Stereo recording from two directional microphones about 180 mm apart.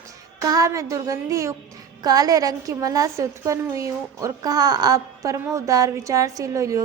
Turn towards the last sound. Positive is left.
turn(degrees=-20)  # may be behind; listen again after turning